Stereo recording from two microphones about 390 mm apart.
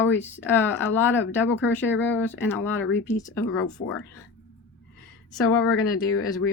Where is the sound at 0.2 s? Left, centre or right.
Centre.